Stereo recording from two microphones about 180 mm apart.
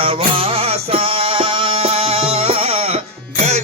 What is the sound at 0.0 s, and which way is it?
Music, 30° right (ahead or behind).